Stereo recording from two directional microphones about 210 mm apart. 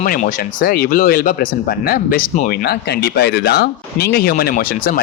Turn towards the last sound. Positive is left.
turn(degrees=45)  # may be behind; listen again after turning